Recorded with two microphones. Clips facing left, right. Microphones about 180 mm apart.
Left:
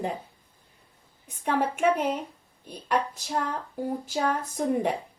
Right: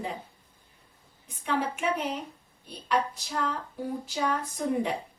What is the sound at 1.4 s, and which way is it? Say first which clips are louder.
Speech: left 5 dB; 50° left (ahead or behind).